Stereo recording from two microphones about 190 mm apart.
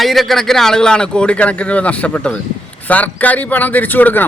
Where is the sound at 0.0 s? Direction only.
Centre (ahead or behind).